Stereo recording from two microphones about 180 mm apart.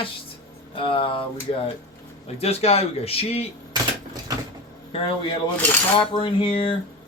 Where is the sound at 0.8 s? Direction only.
30° left (ahead or behind).